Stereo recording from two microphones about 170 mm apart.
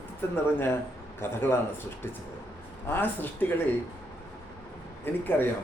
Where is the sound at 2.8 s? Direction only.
10° left (ahead or behind).